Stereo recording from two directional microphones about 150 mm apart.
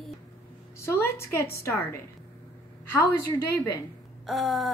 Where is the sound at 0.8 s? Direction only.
15° left (ahead or behind).